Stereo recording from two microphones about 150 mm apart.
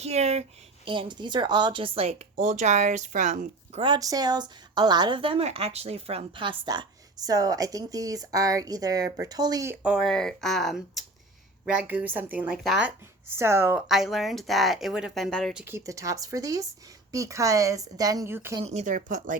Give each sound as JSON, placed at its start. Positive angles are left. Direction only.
{"t": 0.0, "sound": "speech", "side_deg": -45}
{"t": 0.9, "sound": "a woman's voice", "side_deg": -35}
{"t": 2.5, "sound": "speech", "side_deg": -50}
{"t": 3.8, "sound": "a woman's voice", "side_deg": -30}
{"t": 9.8, "sound": "speech", "side_deg": -5}
{"t": 13.3, "sound": "speech", "side_deg": -15}
{"t": 13.8, "sound": "speech", "side_deg": 0}
{"t": 15.6, "sound": "a woman's voice", "side_deg": -20}
{"t": 18.6, "sound": "speech", "side_deg": -45}
{"t": 18.9, "sound": "speech", "side_deg": -60}